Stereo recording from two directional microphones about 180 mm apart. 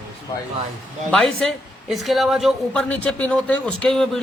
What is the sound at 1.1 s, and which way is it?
Speech, centre (ahead or behind).